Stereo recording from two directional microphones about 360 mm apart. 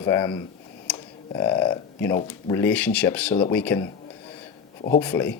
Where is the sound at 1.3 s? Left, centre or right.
Centre.